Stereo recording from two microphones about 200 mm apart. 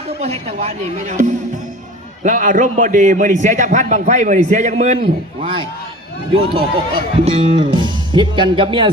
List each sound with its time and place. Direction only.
0.2 s a man's voice: 30° right (ahead or behind)